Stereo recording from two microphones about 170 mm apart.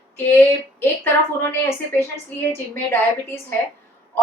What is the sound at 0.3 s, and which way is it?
Speech, 15° left (ahead or behind).